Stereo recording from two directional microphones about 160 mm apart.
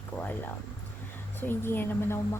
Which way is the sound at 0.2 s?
10° left (ahead or behind).